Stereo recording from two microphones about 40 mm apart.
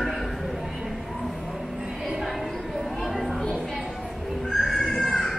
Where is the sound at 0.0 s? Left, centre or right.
Centre.